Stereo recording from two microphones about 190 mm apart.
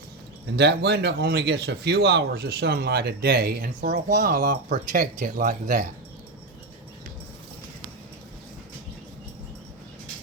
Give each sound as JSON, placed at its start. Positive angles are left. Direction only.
{"t": 0.5, "sound": "speech", "side_deg": -65}